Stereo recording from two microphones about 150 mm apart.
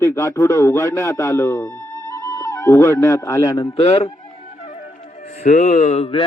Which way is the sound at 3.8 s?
45° left (ahead or behind).